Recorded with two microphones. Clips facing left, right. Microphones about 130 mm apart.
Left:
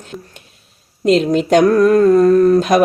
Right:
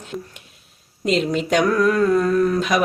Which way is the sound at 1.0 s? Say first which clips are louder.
Left 7 dB; 40° left (ahead or behind).